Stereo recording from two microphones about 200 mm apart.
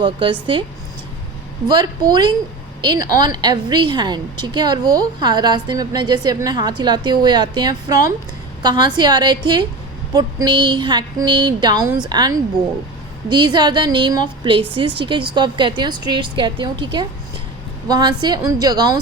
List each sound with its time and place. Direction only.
0.0 s a woman's voice: 25° right (ahead or behind)
1.6 s a woman's voice: 20° right (ahead or behind)